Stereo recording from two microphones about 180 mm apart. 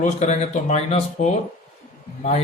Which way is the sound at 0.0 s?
40° left (ahead or behind).